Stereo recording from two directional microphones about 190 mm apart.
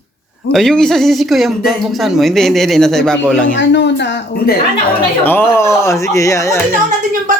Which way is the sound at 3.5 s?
70° left (ahead or behind).